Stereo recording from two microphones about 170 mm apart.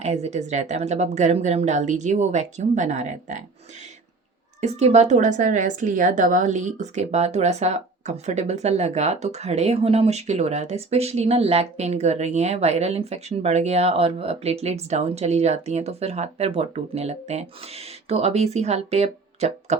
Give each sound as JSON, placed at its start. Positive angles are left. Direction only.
{"t": 0.0, "sound": "speech", "side_deg": -40}
{"t": 4.6, "sound": "a woman's voice", "side_deg": -40}